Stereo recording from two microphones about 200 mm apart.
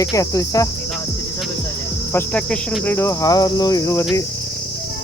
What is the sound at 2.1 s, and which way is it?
Cricket, 10° left (ahead or behind).